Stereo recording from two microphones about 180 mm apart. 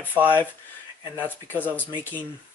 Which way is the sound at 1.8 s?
10° left (ahead or behind).